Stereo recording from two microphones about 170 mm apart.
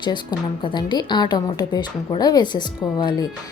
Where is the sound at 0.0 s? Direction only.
25° left (ahead or behind).